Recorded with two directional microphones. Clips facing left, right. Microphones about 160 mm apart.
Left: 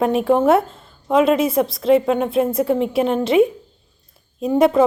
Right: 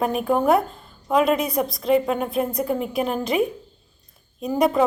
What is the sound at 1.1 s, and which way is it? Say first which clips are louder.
A woman's voice: left 4 dB; centre (ahead or behind).